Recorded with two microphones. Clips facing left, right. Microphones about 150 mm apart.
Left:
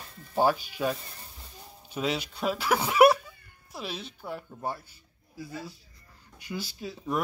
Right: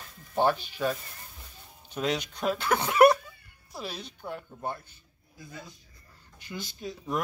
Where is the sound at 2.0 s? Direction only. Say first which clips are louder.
Even; 5° left (ahead or behind).